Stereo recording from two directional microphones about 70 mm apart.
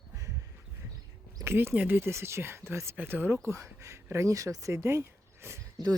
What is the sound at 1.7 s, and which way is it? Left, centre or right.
Speech, right.